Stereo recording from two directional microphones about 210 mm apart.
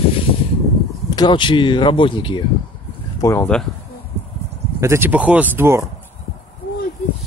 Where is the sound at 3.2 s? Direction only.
10° left (ahead or behind).